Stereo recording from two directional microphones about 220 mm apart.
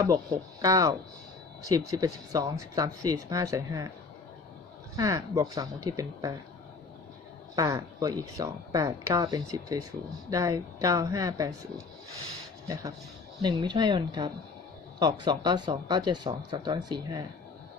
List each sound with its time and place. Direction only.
0.1 s speech: 15° right (ahead or behind)
4.9 s speech: 15° right (ahead or behind)
7.5 s speech: 15° right (ahead or behind)
12.6 s speech: 15° right (ahead or behind)